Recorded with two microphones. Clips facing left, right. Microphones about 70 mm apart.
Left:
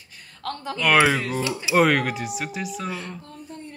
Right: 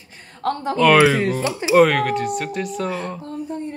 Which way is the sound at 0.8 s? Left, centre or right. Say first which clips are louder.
Right 5 dB; centre.